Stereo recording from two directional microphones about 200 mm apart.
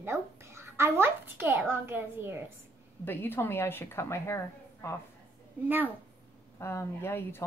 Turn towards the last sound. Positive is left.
turn(degrees=10)  # may be behind; listen again after turning